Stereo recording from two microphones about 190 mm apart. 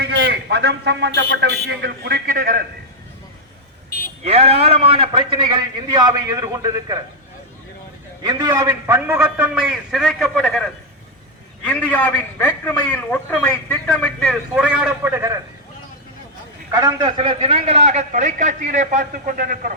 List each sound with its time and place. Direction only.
0.0 s a man's voice: 60° right (ahead or behind)
3.8 s vehicle: 50° left (ahead or behind)
4.2 s a man's voice: 35° right (ahead or behind)
8.2 s a man's voice: 20° right (ahead or behind); by 10.6 s centre (ahead or behind)
11.6 s a man's voice: 10° left (ahead or behind); by 15.4 s 15° right (ahead or behind)
16.7 s a man's voice: 20° right (ahead or behind); by 19.7 s 45° right (ahead or behind)